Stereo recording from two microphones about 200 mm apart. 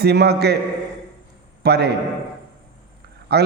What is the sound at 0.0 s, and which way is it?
Music, 55° right (ahead or behind).